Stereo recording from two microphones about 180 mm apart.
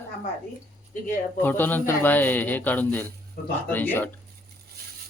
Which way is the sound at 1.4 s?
10° left (ahead or behind).